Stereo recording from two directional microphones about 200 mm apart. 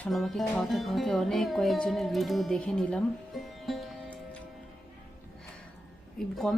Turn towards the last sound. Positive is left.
turn(degrees=0)  # may be behind; listen again after turning